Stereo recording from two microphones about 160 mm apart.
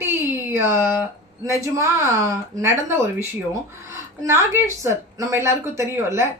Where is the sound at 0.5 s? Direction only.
15° right (ahead or behind).